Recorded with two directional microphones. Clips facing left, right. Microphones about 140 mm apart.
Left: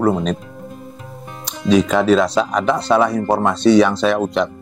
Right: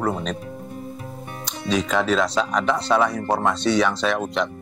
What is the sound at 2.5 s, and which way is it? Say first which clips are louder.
Speech: left 3 dB; 25° left (ahead or behind).